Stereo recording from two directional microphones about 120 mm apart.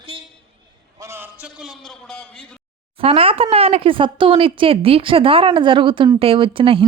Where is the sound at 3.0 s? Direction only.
50° right (ahead or behind).